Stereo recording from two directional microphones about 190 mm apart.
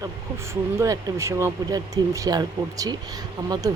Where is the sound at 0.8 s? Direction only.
15° right (ahead or behind).